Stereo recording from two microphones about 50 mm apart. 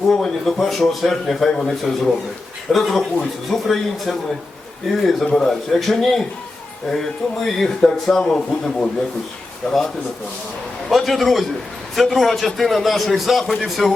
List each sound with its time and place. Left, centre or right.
0.2 s a man's voice: centre
5.2 s a man's voice: centre
5.5 s a man's voice: centre
10.8 s a man's voice: centre